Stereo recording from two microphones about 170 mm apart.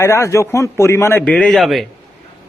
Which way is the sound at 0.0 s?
20° left (ahead or behind).